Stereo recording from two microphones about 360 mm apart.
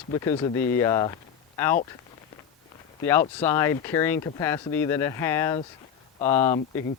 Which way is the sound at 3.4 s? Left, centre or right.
Centre.